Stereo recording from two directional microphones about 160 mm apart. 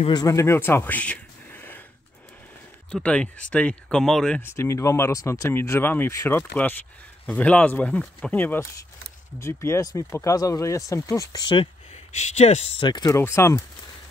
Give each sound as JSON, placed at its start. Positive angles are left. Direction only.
{"t": 0.0, "sound": "speech", "side_deg": 25}
{"t": 2.9, "sound": "speech", "side_deg": 5}
{"t": 4.4, "sound": "speech", "side_deg": 15}
{"t": 12.8, "sound": "speech", "side_deg": 25}